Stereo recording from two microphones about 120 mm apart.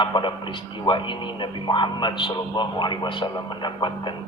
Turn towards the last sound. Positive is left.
turn(degrees=40)  # may be behind; listen again after turning